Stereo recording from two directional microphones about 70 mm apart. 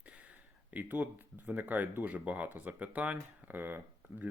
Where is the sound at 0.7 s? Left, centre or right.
Right.